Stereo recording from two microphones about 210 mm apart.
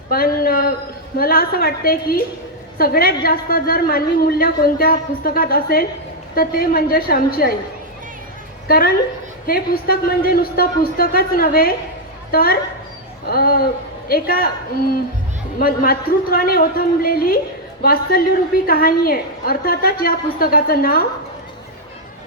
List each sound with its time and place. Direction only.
0.1 s a sound: 45° left (ahead or behind)
1.2 s a woman's voice: 45° left (ahead or behind)
8.6 s a woman's voice: 45° left (ahead or behind)
15.5 s a woman's voice: 45° left (ahead or behind)